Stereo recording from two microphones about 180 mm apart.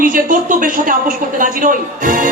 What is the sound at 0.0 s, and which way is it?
Speech, 50° right (ahead or behind).